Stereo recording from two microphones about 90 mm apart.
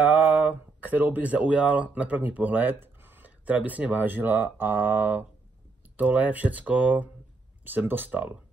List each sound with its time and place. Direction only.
0.0 s speech: 15° right (ahead or behind)